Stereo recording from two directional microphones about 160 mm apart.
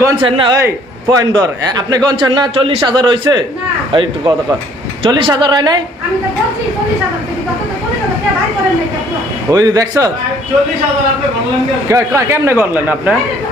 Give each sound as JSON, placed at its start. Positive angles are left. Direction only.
{"t": 0.2, "sound": "speech", "side_deg": -30}
{"t": 0.5, "sound": "a man's voice", "side_deg": -20}
{"t": 9.5, "sound": "a man's voice", "side_deg": -25}
{"t": 11.9, "sound": "a man's voice", "side_deg": -20}